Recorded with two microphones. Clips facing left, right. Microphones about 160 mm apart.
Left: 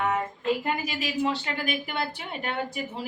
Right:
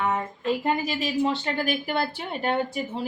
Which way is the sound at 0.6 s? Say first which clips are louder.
Right 4 dB; 30° right (ahead or behind).